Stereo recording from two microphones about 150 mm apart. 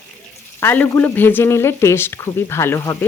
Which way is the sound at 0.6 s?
15° left (ahead or behind).